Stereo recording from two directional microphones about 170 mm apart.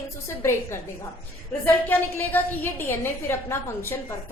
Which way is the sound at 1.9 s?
10° left (ahead or behind).